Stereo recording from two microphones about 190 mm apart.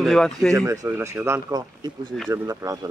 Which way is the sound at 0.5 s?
15° right (ahead or behind).